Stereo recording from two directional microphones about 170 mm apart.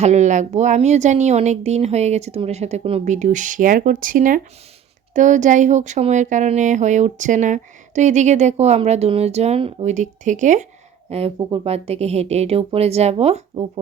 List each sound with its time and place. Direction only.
0.0 s speech: 45° right (ahead or behind)
11.1 s speech: 35° right (ahead or behind)